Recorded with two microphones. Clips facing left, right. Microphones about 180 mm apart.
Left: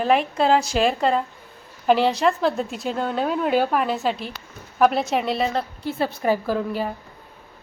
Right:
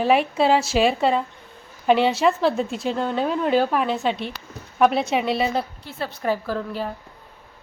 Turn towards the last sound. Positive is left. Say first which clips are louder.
# left 3 dB
turn(degrees=5)  # may be behind; listen again after turning